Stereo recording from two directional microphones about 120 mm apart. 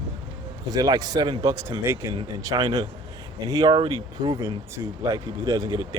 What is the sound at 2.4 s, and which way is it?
Speech, 35° right (ahead or behind).